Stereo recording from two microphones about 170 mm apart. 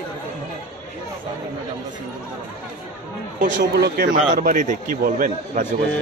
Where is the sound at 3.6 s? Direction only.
75° right (ahead or behind).